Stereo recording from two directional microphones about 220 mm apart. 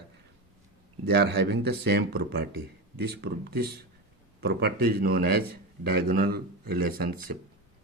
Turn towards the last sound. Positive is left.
turn(degrees=-45)  # may be behind; listen again after turning